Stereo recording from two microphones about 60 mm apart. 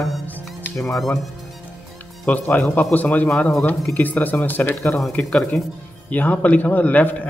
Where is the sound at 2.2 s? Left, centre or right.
Left.